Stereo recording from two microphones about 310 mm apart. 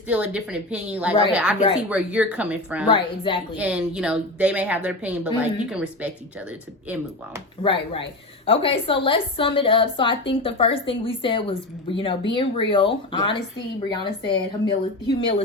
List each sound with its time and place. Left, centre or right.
0.1 s a woman's voice: centre
2.8 s a woman's voice: centre
3.6 s a woman's voice: centre
7.6 s a woman's voice: centre